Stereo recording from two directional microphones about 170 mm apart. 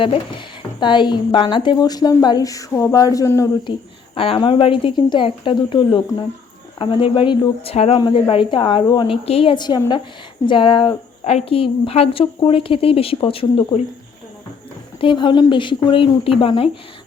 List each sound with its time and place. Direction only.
0.0 s a woman's voice: 30° left (ahead or behind)
4.1 s a woman's voice: 30° left (ahead or behind)
15.0 s a woman's voice: 30° left (ahead or behind)